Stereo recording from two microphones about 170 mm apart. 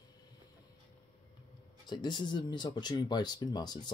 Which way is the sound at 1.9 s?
25° left (ahead or behind).